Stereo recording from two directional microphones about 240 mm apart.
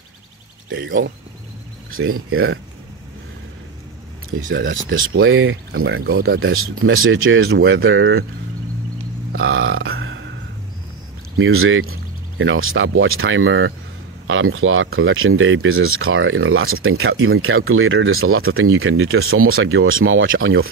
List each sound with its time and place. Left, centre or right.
0.7 s speech: right
4.4 s speech: right
4.8 s speech: right
6.5 s speech: right
9.3 s burping: right
11.3 s speech: right